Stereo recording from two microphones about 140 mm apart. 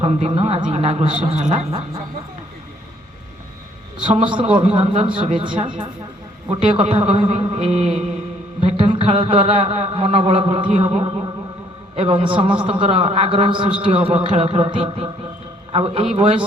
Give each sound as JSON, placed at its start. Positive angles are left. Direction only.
{"t": 0.0, "sound": "speech", "side_deg": -45}
{"t": 3.9, "sound": "a man's voice", "side_deg": -35}
{"t": 6.6, "sound": "speech", "side_deg": -50}
{"t": 10.7, "sound": "speech", "side_deg": -55}
{"t": 11.9, "sound": "a man's voice", "side_deg": -40}